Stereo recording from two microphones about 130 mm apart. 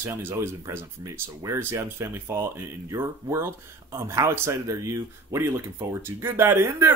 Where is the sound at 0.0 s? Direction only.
20° right (ahead or behind).